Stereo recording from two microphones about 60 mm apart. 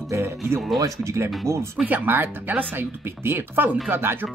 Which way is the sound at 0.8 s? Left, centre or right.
Right.